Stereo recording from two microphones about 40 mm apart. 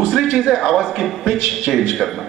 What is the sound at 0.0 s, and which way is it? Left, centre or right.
A man's voice, centre.